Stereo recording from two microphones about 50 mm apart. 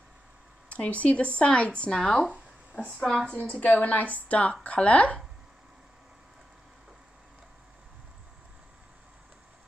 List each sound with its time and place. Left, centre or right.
0.7 s speech: left
2.0 s speech: centre
2.7 s a woman's voice: left